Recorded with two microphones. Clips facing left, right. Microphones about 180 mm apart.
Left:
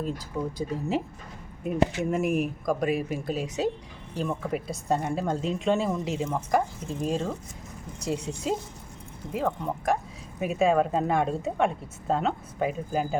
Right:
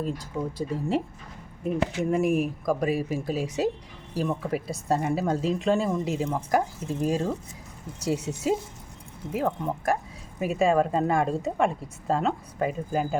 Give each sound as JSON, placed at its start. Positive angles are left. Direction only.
{"t": 0.0, "sound": "speech", "side_deg": 0}
{"t": 2.0, "sound": "speech", "side_deg": 0}